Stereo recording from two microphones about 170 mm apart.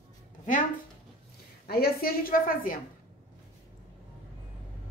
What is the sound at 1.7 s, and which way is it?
A woman's voice, 65° left (ahead or behind).